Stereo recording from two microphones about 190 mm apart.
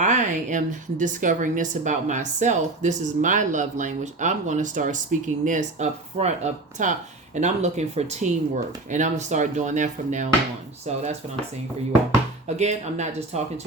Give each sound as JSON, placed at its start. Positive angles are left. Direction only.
{"t": 0.0, "sound": "a woman's voice", "side_deg": -40}
{"t": 12.5, "sound": "a woman's voice", "side_deg": -35}